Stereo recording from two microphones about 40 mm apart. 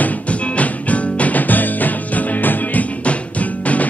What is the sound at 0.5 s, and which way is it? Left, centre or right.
Music, left.